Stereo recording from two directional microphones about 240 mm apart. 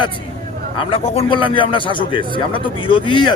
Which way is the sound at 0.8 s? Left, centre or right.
Left.